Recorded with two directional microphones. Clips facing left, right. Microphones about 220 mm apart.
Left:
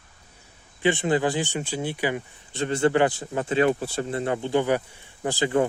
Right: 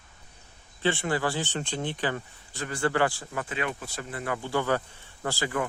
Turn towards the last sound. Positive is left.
turn(degrees=25)  # may be behind; listen again after turning